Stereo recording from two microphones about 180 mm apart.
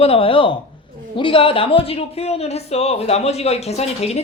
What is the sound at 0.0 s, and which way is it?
Speech, 30° left (ahead or behind).